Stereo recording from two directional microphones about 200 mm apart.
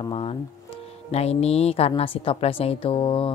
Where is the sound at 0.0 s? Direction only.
25° left (ahead or behind).